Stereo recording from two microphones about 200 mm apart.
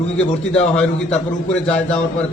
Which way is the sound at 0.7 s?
5° left (ahead or behind).